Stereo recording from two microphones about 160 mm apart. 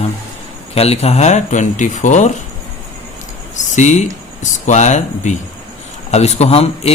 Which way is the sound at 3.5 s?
50° left (ahead or behind).